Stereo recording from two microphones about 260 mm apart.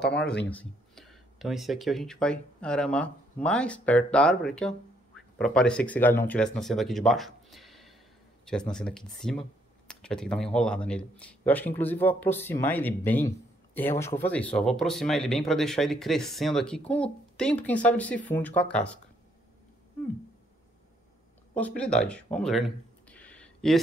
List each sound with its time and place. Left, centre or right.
0.0 s speech: left
0.3 s speech: centre
21.5 s speech: centre